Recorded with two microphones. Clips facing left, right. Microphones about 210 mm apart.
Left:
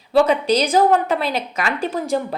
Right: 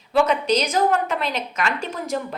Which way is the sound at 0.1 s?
35° left (ahead or behind).